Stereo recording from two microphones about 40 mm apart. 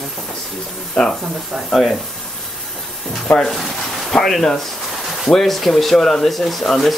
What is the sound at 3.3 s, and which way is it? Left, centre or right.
Speech, left.